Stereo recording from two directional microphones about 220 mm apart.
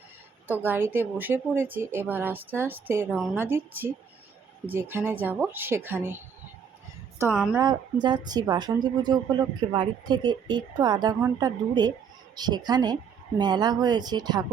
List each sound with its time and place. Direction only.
0.6 s a woman's voice: 10° right (ahead or behind)
7.3 s a woman's voice: centre (ahead or behind)
8.0 s speech: 20° right (ahead or behind)